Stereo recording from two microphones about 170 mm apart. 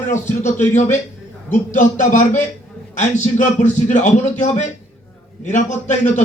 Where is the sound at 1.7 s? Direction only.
45° left (ahead or behind).